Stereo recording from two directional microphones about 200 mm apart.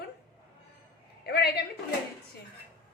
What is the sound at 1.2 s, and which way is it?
Speech, 55° left (ahead or behind).